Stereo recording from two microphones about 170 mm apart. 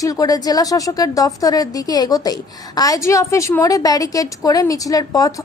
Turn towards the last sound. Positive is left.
turn(degrees=20)  # may be behind; listen again after turning